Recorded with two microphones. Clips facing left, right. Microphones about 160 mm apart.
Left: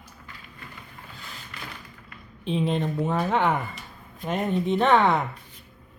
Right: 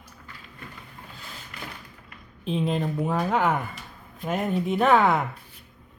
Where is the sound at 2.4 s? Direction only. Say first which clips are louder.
Left 1 dB; centre (ahead or behind).